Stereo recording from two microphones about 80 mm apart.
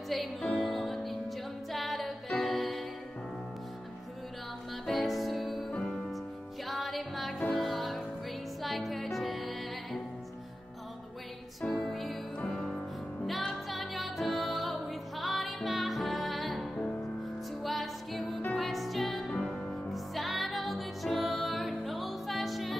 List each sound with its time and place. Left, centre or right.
0.4 s music: centre
4.8 s music: centre
11.6 s music: centre
17.6 s music: centre